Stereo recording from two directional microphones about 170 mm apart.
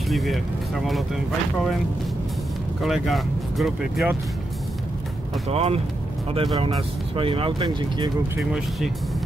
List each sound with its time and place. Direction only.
0.1 s speech: centre (ahead or behind)
2.8 s speech: centre (ahead or behind)
5.5 s speech: 35° right (ahead or behind)
8.4 s speech: centre (ahead or behind)